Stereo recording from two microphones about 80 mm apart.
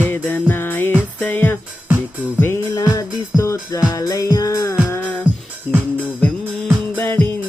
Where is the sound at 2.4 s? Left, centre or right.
Left.